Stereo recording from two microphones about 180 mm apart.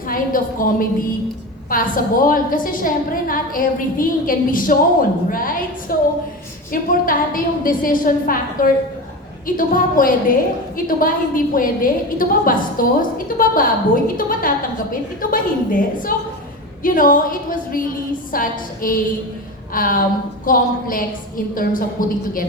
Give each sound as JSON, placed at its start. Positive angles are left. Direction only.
{"t": 0.1, "sound": "a woman's voice", "side_deg": 50}